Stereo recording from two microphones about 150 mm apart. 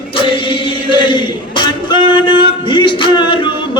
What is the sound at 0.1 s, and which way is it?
Chant, 35° left (ahead or behind).